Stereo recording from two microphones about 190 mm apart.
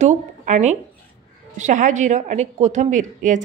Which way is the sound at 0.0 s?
40° right (ahead or behind).